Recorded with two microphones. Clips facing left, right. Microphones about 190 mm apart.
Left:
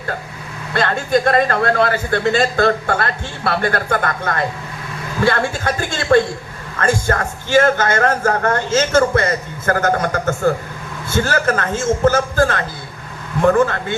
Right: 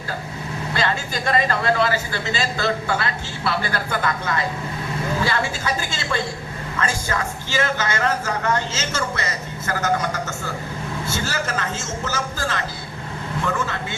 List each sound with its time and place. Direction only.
0.7 s a man's voice: 55° left (ahead or behind)